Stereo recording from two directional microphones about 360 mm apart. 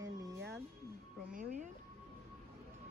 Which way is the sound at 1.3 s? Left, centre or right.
Centre.